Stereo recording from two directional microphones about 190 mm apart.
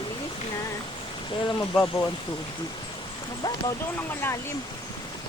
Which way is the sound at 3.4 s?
15° left (ahead or behind).